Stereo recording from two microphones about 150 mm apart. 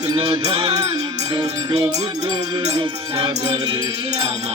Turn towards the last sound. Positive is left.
turn(degrees=-40)  # may be behind; listen again after turning